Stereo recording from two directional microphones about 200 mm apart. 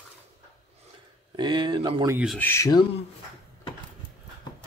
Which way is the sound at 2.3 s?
10° left (ahead or behind).